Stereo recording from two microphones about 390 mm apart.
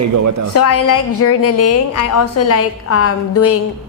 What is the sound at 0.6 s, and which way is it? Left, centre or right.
A woman's voice, left.